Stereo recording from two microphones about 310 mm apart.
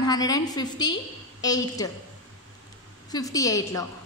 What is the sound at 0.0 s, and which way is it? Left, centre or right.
A woman's voice, centre.